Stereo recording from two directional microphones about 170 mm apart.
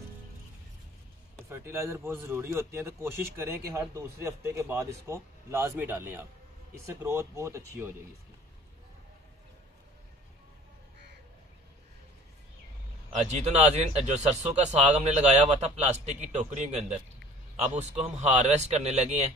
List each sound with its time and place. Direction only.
1.5 s a man's voice: 15° right (ahead or behind)
13.3 s speech: 40° right (ahead or behind)